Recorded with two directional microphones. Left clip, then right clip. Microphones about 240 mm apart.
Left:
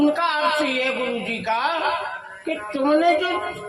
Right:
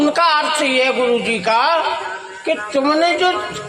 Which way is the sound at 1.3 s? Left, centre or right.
Right.